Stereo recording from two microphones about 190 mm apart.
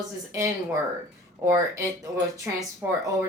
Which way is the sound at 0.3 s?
15° right (ahead or behind).